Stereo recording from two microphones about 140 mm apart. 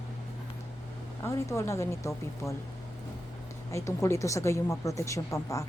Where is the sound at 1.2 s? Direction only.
20° left (ahead or behind).